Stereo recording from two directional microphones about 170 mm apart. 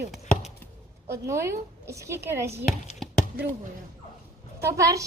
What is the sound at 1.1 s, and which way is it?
Speech, 15° right (ahead or behind).